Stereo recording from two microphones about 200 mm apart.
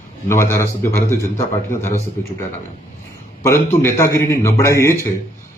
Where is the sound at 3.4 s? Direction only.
15° left (ahead or behind).